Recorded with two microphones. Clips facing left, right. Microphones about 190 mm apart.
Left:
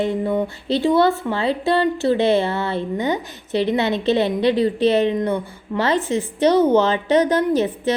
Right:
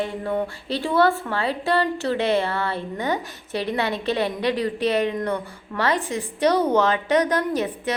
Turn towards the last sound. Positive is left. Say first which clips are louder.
# left 6 dB
turn(degrees=25)  # may be behind; listen again after turning